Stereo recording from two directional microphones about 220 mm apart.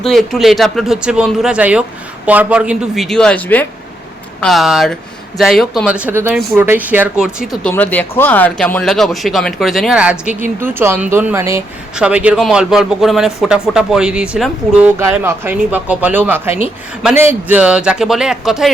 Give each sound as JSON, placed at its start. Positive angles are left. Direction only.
{"t": 0.0, "sound": "speech", "side_deg": 0}